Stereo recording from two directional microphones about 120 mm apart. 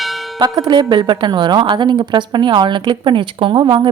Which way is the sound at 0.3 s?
35° right (ahead or behind).